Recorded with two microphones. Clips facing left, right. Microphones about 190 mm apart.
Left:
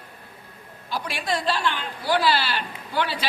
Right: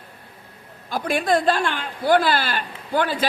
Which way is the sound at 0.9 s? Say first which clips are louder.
Right 7 dB; 50° right (ahead or behind).